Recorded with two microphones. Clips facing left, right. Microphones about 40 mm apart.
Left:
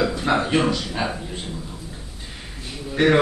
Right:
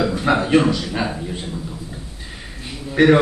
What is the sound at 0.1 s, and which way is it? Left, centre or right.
Speech, centre.